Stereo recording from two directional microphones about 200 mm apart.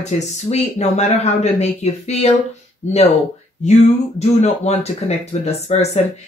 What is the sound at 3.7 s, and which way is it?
Speech, 35° left (ahead or behind).